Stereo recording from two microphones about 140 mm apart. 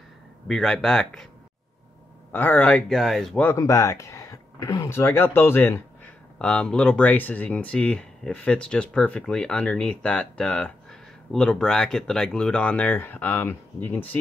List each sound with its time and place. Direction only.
0.5 s speech: 5° left (ahead or behind)
2.3 s speech: 15° left (ahead or behind)
3.4 s speech: 25° left (ahead or behind)
6.3 s speech: 5° left (ahead or behind)